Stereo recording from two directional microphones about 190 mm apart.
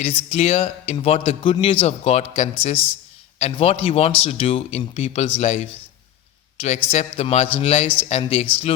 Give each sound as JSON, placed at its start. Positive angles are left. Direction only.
{"t": 0.0, "sound": "a man's voice", "side_deg": 30}